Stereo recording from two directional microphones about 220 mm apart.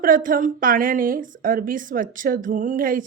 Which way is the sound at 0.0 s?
40° right (ahead or behind).